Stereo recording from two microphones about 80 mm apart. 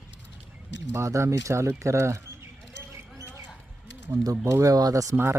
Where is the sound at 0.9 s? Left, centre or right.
Right.